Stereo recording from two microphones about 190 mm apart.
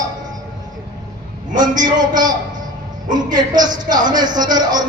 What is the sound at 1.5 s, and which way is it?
Speech, 20° right (ahead or behind).